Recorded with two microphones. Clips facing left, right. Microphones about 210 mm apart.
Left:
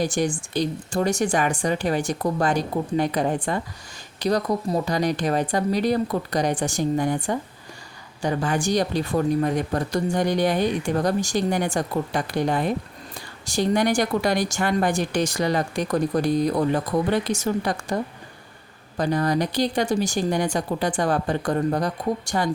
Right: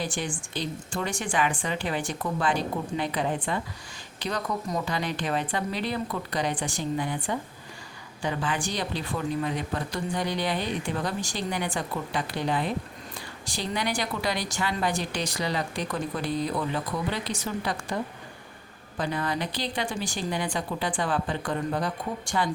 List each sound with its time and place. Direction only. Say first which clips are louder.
0.0 s speech: left 8 dB; 40° left (ahead or behind)